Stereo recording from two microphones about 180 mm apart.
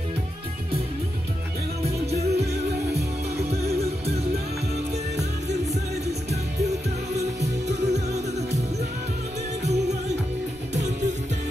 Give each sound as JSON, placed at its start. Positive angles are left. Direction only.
{"t": 1.8, "sound": "music", "side_deg": -35}
{"t": 7.2, "sound": "music", "side_deg": -40}